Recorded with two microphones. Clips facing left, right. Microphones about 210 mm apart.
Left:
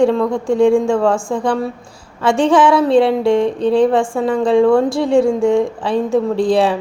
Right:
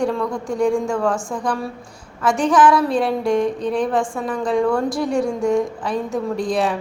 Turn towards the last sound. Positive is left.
turn(degrees=30)  # may be behind; listen again after turning